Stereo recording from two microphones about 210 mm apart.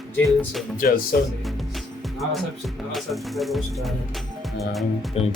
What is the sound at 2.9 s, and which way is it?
Music, centre (ahead or behind).